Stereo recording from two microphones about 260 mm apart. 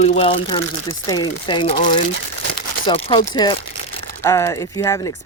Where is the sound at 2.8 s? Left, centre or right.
Left.